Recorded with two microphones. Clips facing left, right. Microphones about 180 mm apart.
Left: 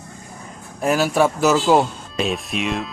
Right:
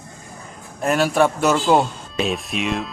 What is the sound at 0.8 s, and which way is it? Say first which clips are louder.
A man's voice: even; centre (ahead or behind).